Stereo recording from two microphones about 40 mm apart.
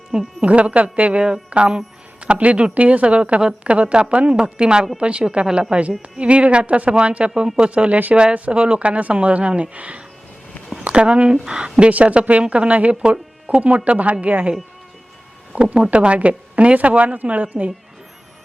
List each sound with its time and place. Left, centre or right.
0.1 s speech: centre
0.4 s speech: right
7.3 s speech: centre
7.7 s speech: right
8.8 s speech: right
11.9 s speech: right
15.5 s speech: right